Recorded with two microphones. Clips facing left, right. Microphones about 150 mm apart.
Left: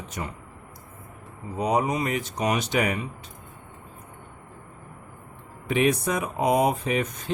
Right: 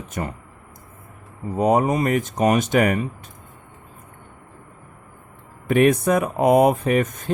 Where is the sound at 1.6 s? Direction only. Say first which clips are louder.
Right 6 dB; 50° right (ahead or behind).